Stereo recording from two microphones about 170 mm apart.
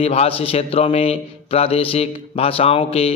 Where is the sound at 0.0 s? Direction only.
35° left (ahead or behind).